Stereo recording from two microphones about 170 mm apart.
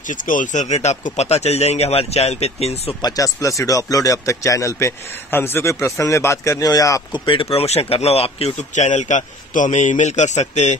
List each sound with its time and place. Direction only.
0.1 s speech: 50° left (ahead or behind)
3.0 s speech: 20° left (ahead or behind); by 10.8 s 40° left (ahead or behind)